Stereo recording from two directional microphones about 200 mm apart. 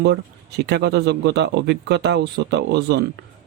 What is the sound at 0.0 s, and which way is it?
Speech, 55° right (ahead or behind).